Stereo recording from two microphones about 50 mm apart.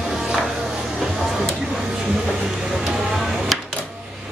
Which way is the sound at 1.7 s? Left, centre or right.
Centre.